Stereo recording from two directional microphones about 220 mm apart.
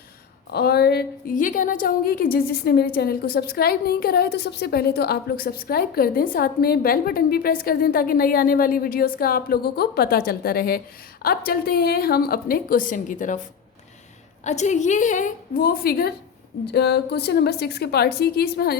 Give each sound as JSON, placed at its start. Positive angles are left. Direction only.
{"t": 0.5, "sound": "a woman's voice", "side_deg": 45}
{"t": 14.4, "sound": "a woman's voice", "side_deg": 30}